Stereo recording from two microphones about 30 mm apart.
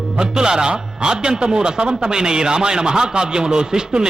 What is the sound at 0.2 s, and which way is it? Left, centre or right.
Music, right.